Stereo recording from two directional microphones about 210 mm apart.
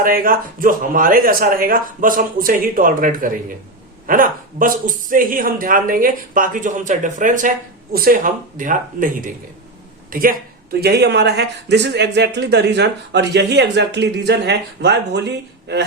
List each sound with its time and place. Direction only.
0.0 s a man's voice: 45° right (ahead or behind)